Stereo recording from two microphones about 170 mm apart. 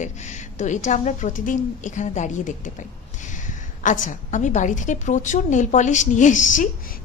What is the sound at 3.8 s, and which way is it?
A woman's voice, 50° left (ahead or behind).